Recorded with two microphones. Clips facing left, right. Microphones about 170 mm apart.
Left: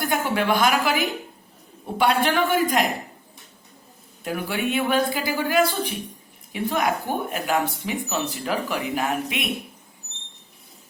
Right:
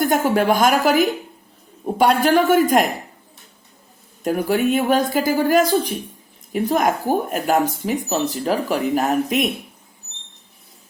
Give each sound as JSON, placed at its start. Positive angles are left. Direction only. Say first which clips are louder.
{"t": 0.0, "sound": "speech", "louder": "right 6 dB", "side_deg": -45}
{"t": 4.2, "sound": "speech", "louder": "right 8 dB", "side_deg": -40}